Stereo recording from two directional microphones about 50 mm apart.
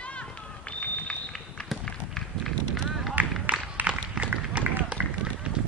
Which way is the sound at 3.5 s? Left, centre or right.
Right.